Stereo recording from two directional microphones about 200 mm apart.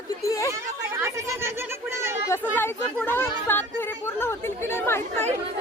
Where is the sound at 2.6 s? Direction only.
10° left (ahead or behind).